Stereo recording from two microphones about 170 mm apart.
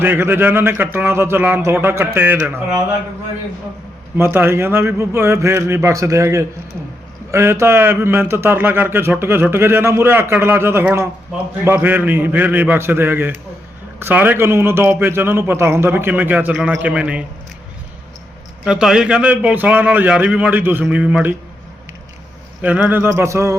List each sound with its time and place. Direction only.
0.0 s a man's voice: 10° right (ahead or behind)
4.2 s a man's voice: 15° right (ahead or behind)
18.6 s a man's voice: 5° right (ahead or behind)
22.6 s a man's voice: 10° right (ahead or behind)